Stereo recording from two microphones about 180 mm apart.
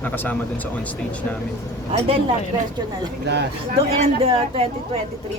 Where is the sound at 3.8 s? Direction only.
35° right (ahead or behind).